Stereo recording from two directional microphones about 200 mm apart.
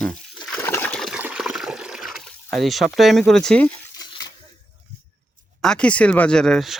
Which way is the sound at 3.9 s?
20° left (ahead or behind).